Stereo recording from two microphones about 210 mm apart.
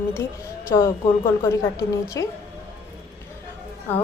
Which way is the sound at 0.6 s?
15° left (ahead or behind).